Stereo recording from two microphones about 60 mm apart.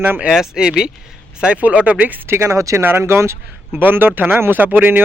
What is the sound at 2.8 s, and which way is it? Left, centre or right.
Speech, right.